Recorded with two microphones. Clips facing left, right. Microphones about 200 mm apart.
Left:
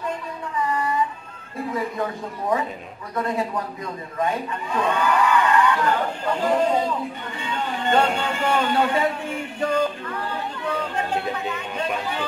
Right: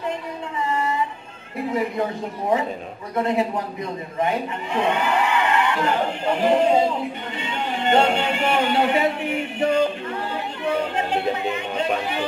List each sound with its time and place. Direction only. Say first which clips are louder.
0.7 s music: right 2 dB; 25° right (ahead or behind)
1.7 s speech: right 3 dB; 25° right (ahead or behind)
3.2 s speech: right 3 dB; 25° right (ahead or behind)